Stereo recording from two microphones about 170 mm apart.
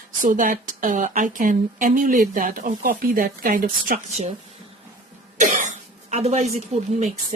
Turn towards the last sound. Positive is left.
turn(degrees=-40)  # may be behind; listen again after turning